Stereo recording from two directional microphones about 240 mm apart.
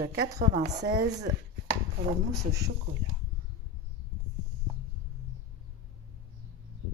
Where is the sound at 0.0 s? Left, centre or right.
Right.